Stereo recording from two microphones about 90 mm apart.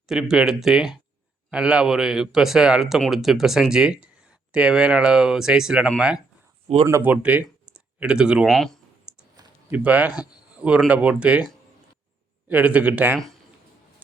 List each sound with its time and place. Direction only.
0.1 s speech: 5° right (ahead or behind)
8.4 s speech: 5° left (ahead or behind)
9.3 s a sound: 45° right (ahead or behind)
9.7 s speech: 15° right (ahead or behind)